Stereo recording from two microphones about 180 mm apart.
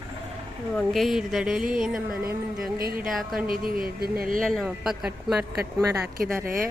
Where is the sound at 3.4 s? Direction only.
55° right (ahead or behind).